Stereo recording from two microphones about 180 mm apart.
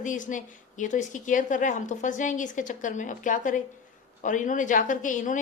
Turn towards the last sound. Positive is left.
turn(degrees=45)  # may be behind; listen again after turning